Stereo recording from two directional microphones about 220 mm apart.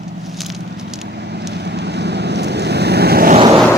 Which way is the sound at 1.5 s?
50° right (ahead or behind).